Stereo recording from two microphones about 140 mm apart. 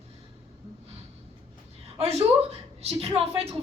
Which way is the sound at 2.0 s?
45° right (ahead or behind).